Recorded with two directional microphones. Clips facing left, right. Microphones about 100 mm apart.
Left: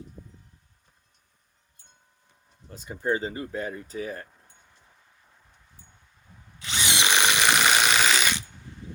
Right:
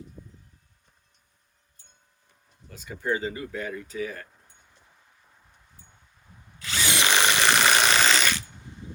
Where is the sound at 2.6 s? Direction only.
35° left (ahead or behind).